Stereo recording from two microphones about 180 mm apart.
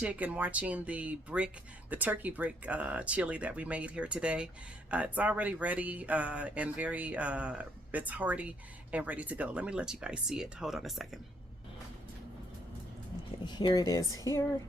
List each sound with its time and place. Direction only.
0.0 s speech: 5° right (ahead or behind)
13.4 s speech: 25° left (ahead or behind)